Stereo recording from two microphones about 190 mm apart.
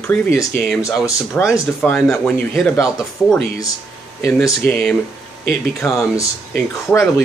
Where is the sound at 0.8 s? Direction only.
15° left (ahead or behind).